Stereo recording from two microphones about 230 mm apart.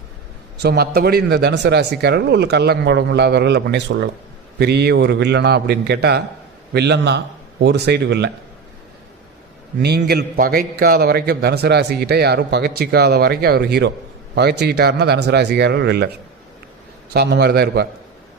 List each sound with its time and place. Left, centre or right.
0.6 s speech: right
9.8 s speech: right
17.2 s speech: right